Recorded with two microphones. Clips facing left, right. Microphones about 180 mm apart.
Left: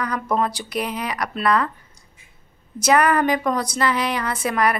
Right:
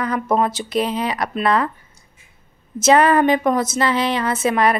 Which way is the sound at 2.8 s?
25° right (ahead or behind).